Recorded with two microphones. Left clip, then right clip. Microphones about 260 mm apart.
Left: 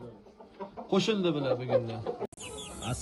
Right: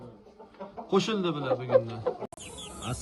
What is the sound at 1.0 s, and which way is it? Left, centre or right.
Speech, centre.